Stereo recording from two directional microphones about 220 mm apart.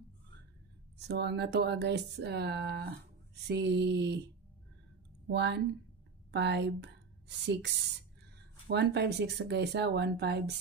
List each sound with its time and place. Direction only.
0.9 s speech: 50° right (ahead or behind)
5.3 s a woman's voice: 50° right (ahead or behind)